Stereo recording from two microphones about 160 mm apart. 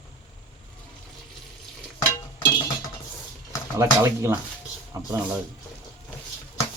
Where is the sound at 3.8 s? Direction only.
15° right (ahead or behind).